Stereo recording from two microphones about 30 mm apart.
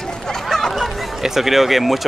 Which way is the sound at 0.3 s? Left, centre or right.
Centre.